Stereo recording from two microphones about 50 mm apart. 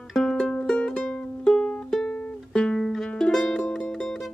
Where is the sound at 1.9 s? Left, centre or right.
Centre.